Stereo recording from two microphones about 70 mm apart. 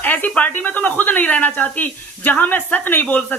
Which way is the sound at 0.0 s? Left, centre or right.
Left.